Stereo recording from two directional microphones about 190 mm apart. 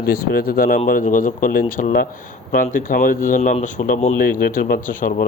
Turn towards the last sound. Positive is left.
turn(degrees=50)  # may be behind; listen again after turning